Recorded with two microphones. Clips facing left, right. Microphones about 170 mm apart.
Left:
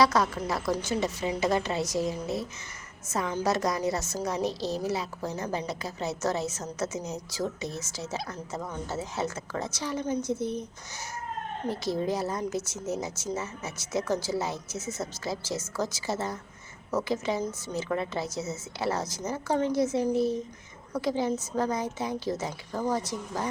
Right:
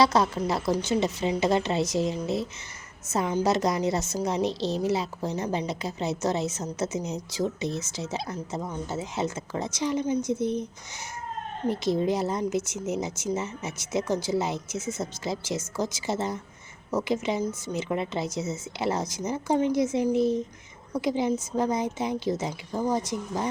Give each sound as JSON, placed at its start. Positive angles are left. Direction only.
{"t": 0.0, "sound": "a woman's voice", "side_deg": -25}
{"t": 11.7, "sound": "a woman's voice", "side_deg": -20}